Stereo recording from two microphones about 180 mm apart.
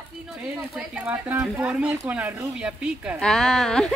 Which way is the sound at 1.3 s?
10° right (ahead or behind).